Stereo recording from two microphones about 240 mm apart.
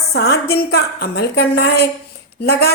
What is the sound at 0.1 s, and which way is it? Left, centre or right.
A woman's voice, left.